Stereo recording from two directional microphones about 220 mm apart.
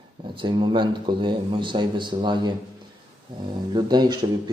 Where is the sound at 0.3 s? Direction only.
20° right (ahead or behind).